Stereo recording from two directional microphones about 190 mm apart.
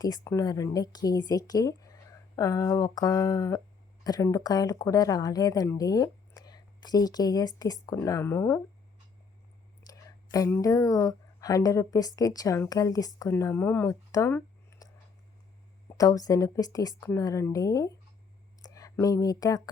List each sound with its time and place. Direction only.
0.0 s a woman's voice: 20° left (ahead or behind)
10.3 s a woman's voice: 15° left (ahead or behind)
15.9 s speech: 20° left (ahead or behind)